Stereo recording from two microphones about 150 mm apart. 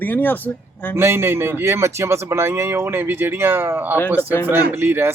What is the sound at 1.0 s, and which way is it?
Speech, 15° right (ahead or behind).